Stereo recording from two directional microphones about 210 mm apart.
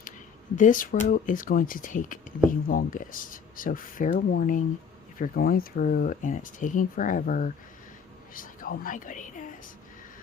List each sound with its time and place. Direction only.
0.5 s speech: 40° left (ahead or behind)